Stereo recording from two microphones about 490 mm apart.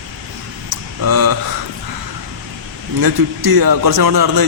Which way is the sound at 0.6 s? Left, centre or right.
Right.